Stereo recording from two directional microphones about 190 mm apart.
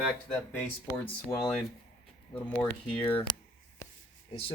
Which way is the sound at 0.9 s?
15° left (ahead or behind).